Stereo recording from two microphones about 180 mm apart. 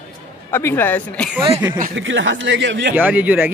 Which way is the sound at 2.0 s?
90° right.